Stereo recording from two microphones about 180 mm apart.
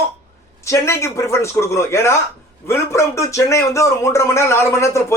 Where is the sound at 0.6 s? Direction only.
15° left (ahead or behind).